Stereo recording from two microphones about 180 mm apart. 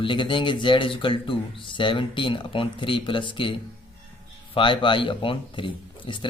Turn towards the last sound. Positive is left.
turn(degrees=30)  # may be behind; listen again after turning